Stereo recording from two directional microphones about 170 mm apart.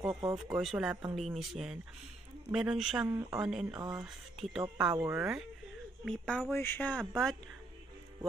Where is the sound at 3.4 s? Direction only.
5° right (ahead or behind).